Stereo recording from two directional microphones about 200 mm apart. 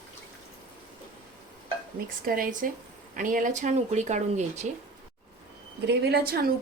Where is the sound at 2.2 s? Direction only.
45° right (ahead or behind).